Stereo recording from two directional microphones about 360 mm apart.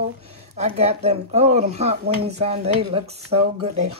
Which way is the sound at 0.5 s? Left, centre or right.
Centre.